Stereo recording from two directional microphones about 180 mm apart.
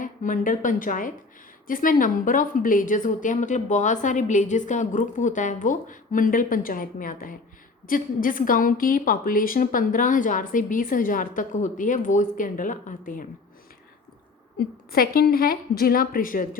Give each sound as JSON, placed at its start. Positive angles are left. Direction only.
{"t": 0.0, "sound": "a woman's voice", "side_deg": 45}
{"t": 14.6, "sound": "a woman's voice", "side_deg": 55}